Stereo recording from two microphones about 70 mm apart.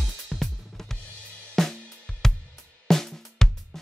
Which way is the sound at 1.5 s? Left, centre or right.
Centre.